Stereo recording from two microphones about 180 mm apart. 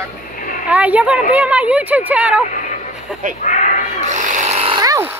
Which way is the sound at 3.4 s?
45° left (ahead or behind).